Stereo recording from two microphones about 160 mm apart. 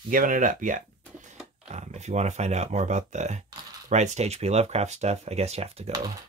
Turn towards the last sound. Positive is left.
turn(degrees=-40)  # may be behind; listen again after turning